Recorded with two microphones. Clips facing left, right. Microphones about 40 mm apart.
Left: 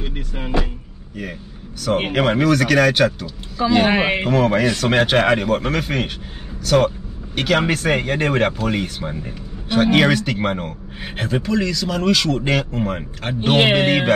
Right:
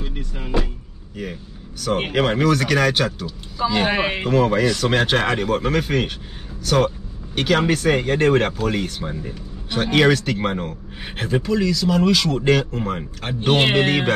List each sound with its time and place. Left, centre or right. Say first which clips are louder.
0.0 s vehicle: left 2 dB; left
1.9 s speech: left 2 dB; centre
7.3 s speech: even; centre
12.8 s speech: left 2 dB; centre